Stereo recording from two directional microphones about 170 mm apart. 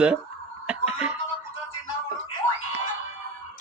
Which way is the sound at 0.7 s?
5° right (ahead or behind).